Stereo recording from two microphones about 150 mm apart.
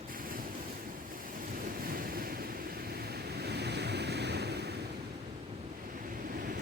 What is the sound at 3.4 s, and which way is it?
Waves, 90° right.